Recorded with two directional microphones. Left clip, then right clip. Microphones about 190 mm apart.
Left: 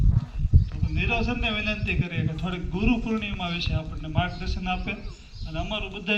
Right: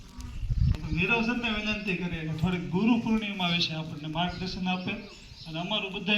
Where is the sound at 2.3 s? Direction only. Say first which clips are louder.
Right 1 dB; centre (ahead or behind).